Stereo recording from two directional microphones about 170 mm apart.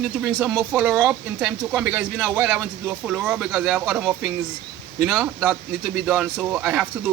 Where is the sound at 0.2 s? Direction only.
Centre (ahead or behind).